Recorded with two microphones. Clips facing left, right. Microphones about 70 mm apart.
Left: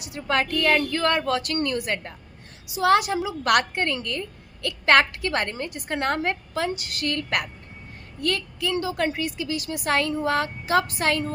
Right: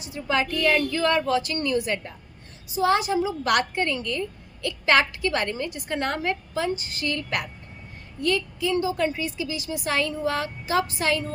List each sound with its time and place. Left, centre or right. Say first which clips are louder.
0.3 s a woman's voice: left 1 dB; left